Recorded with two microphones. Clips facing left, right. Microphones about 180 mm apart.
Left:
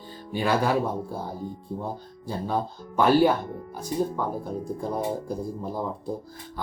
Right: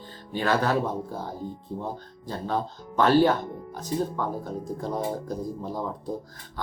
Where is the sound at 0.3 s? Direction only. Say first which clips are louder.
Left 1 dB; 10° left (ahead or behind).